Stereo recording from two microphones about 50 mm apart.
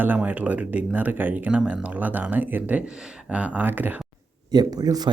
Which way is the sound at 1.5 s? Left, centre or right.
Right.